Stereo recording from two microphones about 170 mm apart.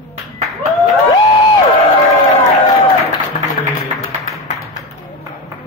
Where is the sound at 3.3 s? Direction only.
45° left (ahead or behind).